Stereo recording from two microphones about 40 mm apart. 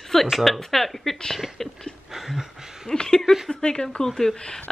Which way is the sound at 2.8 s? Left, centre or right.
Centre.